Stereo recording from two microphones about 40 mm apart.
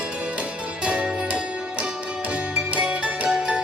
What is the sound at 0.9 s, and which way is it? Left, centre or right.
Music, right.